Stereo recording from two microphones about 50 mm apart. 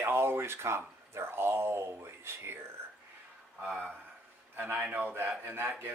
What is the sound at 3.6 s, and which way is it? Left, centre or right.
Speech, centre.